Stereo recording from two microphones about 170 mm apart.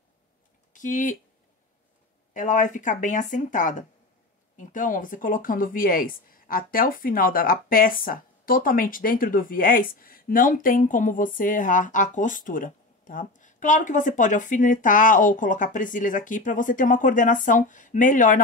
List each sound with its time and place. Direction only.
0.7 s speech: 50° left (ahead or behind)
2.3 s speech: 50° left (ahead or behind)